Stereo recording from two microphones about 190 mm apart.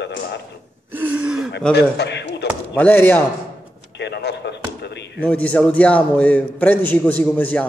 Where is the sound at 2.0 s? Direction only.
65° left (ahead or behind).